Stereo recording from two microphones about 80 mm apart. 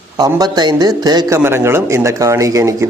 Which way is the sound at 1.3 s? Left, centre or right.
Right.